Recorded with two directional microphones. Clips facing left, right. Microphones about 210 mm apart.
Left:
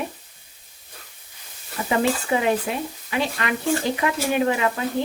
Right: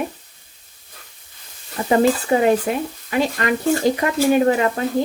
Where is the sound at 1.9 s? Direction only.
40° right (ahead or behind).